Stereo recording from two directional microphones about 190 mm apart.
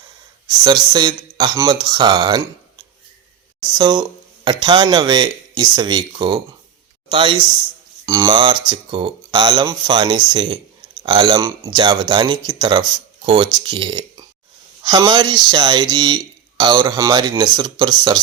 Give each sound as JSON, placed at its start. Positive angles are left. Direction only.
{"t": 0.6, "sound": "speech", "side_deg": -25}
{"t": 3.8, "sound": "speech", "side_deg": -20}